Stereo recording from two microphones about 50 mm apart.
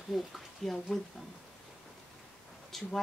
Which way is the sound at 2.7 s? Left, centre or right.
Centre.